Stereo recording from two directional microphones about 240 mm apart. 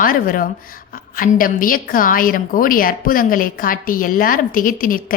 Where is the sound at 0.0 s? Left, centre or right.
Left.